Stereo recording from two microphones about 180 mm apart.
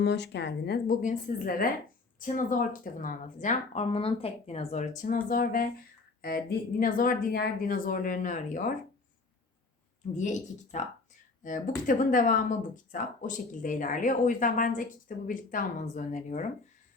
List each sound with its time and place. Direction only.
0.0 s speech: 70° left (ahead or behind)
1.0 s speech: 50° left (ahead or behind)
10.2 s speech: 40° left (ahead or behind)